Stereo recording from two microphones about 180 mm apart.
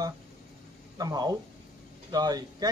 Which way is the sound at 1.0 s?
20° right (ahead or behind).